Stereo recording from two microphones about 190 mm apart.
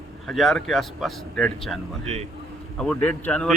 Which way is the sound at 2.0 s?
35° right (ahead or behind).